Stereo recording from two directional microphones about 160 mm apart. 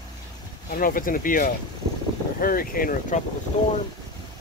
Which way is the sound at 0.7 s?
60° left (ahead or behind).